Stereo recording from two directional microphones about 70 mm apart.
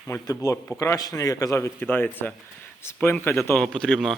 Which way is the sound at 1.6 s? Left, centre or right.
Left.